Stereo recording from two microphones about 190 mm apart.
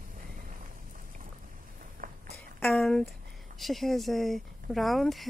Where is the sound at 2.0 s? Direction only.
45° right (ahead or behind).